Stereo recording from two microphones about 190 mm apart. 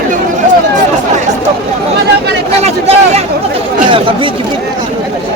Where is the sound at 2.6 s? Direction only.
35° right (ahead or behind).